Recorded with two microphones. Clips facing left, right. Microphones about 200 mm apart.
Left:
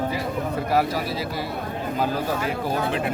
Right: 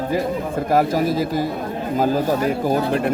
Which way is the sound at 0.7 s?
45° right (ahead or behind).